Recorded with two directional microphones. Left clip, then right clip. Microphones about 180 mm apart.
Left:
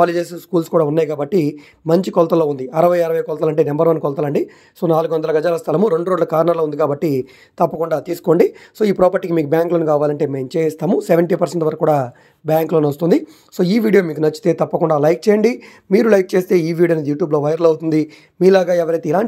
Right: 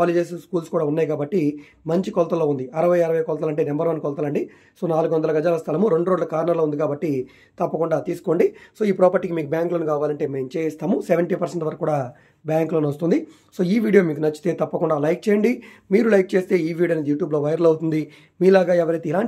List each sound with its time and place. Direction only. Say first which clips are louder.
0.0 s speech: left 4 dB; 45° left (ahead or behind)